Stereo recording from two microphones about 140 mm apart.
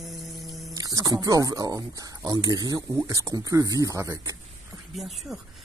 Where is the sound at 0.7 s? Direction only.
25° right (ahead or behind).